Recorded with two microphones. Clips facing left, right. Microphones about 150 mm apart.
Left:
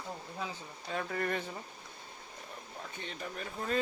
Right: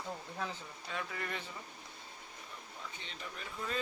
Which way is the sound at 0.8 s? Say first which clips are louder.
Left 7 dB; 45° left (ahead or behind).